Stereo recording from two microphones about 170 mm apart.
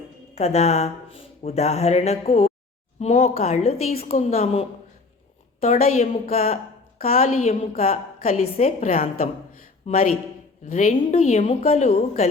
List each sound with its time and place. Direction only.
0.3 s a woman's voice: 40° left (ahead or behind)
5.7 s a woman's voice: 55° left (ahead or behind)
6.3 s a woman's voice: 35° left (ahead or behind)